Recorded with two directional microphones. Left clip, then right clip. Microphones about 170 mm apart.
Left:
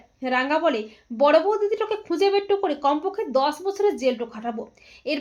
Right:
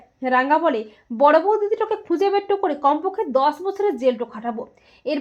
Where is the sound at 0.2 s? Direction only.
35° right (ahead or behind).